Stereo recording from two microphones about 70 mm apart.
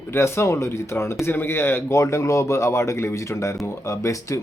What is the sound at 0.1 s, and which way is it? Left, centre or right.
Speech, left.